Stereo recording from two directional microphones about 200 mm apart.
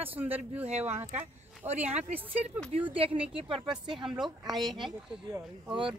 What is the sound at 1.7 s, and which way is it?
Speech, 35° right (ahead or behind).